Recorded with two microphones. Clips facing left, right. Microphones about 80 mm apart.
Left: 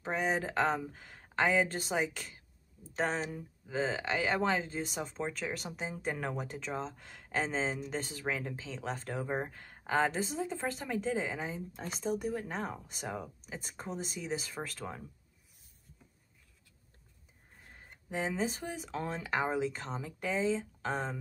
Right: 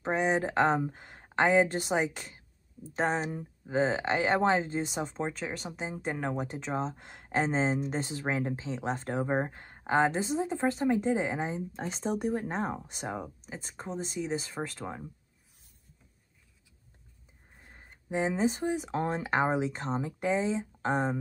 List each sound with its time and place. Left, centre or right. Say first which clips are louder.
0.0 s speech: right 5 dB; right
5.4 s speech: right 2 dB; centre
6.6 s speech: right 5 dB; right
13.2 s speech: right 3 dB; centre
18.2 s speech: right 6 dB; right